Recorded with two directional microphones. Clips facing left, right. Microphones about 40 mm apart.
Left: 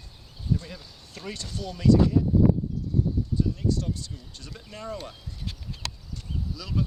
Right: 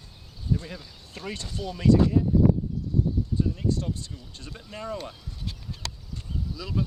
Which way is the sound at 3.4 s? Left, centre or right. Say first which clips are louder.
Left 1 dB; right.